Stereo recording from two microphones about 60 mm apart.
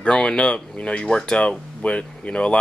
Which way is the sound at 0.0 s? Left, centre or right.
Centre.